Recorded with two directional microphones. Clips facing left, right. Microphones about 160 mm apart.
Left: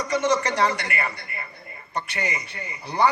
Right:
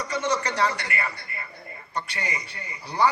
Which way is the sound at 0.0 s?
20° left (ahead or behind).